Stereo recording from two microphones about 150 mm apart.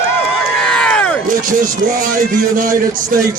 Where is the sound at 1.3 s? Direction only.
65° right (ahead or behind).